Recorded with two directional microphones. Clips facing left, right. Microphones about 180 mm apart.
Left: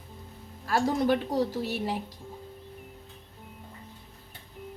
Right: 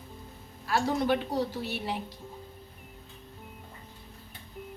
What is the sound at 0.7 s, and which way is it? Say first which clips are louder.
A woman's voice: left 2 dB; 45° left (ahead or behind).